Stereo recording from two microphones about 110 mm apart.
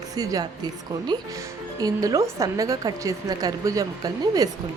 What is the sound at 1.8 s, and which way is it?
Speech, 35° right (ahead or behind).